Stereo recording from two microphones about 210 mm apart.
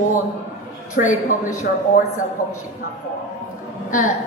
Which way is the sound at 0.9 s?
35° left (ahead or behind).